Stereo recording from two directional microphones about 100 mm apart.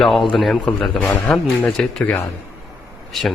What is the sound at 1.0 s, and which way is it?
Speech, 20° left (ahead or behind).